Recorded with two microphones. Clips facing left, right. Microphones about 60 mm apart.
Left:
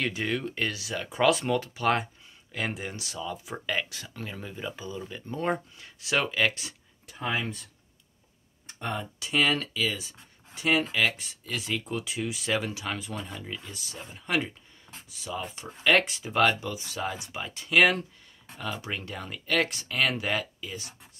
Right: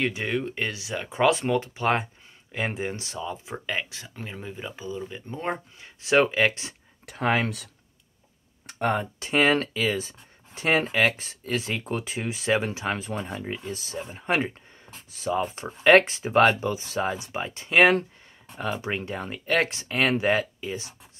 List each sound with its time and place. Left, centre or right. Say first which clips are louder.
0.0 s speech: right 3 dB; right
7.1 s speech: right 6 dB; right
8.6 s a sound: right 10 dB; right
8.9 s speech: left 1 dB; right